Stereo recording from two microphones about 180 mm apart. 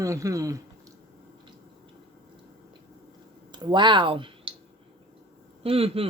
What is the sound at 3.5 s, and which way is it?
Speech, 25° right (ahead or behind).